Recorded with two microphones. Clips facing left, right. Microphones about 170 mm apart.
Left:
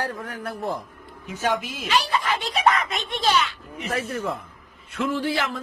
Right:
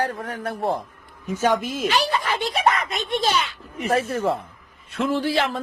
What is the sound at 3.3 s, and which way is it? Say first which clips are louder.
A man's voice: left 1 dB; 30° right (ahead or behind).